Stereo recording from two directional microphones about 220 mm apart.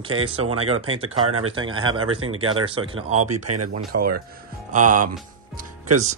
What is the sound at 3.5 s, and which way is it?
Speech, 90° right.